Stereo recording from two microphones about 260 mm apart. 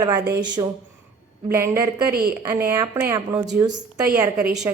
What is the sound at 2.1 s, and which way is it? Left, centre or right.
Speech, right.